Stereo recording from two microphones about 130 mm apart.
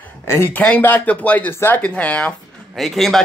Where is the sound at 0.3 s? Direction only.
15° left (ahead or behind).